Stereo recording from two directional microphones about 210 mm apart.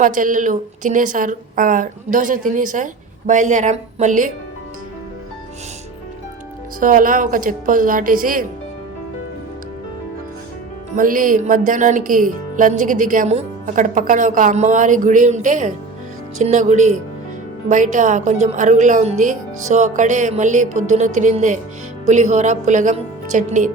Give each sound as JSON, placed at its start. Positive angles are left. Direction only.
{"t": 0.0, "sound": "speech", "side_deg": -40}
{"t": 6.7, "sound": "speech", "side_deg": -40}
{"t": 10.9, "sound": "speech", "side_deg": -40}